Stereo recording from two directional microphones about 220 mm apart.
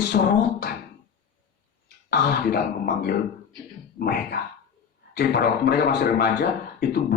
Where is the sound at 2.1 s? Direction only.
45° left (ahead or behind).